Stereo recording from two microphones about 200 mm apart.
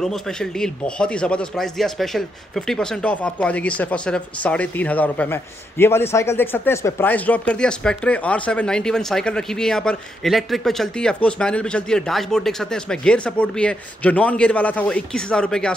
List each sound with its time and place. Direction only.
0.0 s a man's voice: 5° left (ahead or behind)